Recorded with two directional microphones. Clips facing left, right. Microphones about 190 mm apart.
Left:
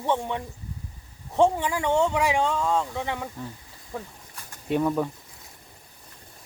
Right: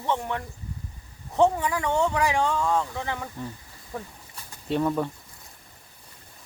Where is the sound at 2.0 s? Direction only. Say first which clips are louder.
Left 1 dB; 10° left (ahead or behind).